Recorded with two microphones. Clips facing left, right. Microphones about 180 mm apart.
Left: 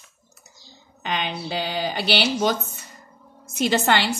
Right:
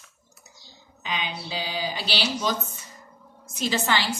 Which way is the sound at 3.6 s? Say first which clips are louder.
Left 5 dB; 65° left (ahead or behind).